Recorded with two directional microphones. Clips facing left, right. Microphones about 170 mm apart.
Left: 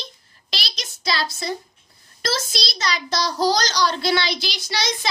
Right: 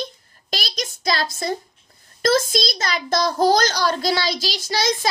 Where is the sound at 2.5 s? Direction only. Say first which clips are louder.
Right 3 dB; 50° right (ahead or behind).